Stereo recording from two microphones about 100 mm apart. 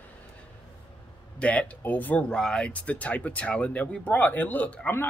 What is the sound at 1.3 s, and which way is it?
Speech, 10° left (ahead or behind).